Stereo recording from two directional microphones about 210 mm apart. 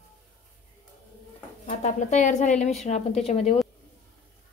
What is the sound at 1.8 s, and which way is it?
A woman's voice, 35° left (ahead or behind).